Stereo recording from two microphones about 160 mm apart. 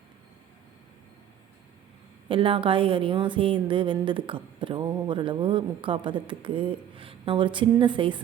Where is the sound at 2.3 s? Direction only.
35° right (ahead or behind).